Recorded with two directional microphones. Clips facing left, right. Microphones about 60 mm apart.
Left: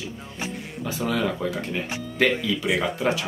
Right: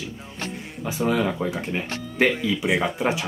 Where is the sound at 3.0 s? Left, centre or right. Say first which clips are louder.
Even; centre.